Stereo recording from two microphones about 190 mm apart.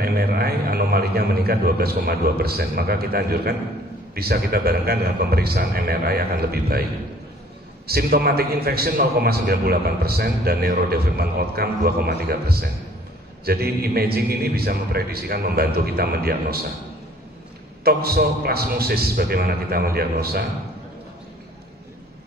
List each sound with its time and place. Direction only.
0.0 s a man's voice: 55° right (ahead or behind)
7.8 s a man's voice: 55° right (ahead or behind)
17.8 s a man's voice: 55° right (ahead or behind)